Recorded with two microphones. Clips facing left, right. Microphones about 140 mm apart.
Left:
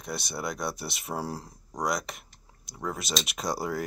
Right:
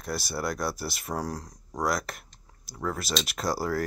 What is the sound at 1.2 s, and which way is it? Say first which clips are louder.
Speech: right 1 dB; 30° left (ahead or behind).